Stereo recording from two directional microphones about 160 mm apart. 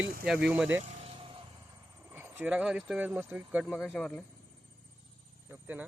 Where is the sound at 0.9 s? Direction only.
45° right (ahead or behind).